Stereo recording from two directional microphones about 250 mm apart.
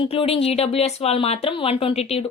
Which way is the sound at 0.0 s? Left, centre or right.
Left.